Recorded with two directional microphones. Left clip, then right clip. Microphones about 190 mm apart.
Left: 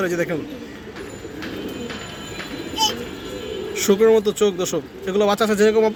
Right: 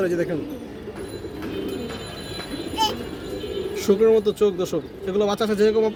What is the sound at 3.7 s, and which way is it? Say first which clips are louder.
A man's voice: left 2 dB; centre (ahead or behind).